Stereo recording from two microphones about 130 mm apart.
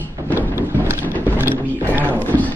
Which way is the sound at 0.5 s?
15° right (ahead or behind).